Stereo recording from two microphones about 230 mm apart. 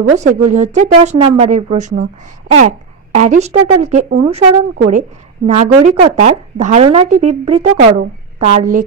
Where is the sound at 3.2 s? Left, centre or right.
Right.